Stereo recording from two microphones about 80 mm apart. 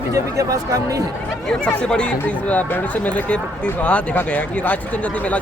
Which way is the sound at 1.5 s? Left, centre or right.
Centre.